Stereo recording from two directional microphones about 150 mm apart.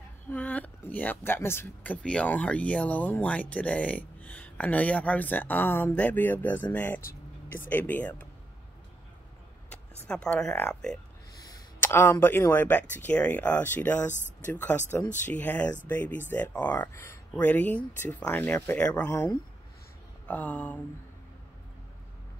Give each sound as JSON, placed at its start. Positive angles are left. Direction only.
{"t": 0.3, "sound": "speech", "side_deg": 10}
{"t": 9.7, "sound": "speech", "side_deg": 5}
{"t": 11.3, "sound": "speech", "side_deg": 20}
{"t": 19.0, "sound": "speech", "side_deg": 20}
{"t": 20.2, "sound": "speech", "side_deg": 10}